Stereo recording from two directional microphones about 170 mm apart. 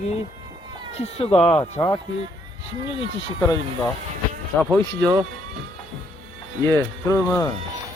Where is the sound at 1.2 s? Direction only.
35° left (ahead or behind).